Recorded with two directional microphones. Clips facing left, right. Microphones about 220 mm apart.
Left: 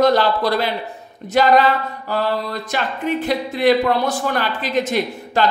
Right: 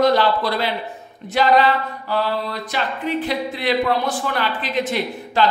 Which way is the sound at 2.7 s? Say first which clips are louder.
Left 2 dB; 45° left (ahead or behind).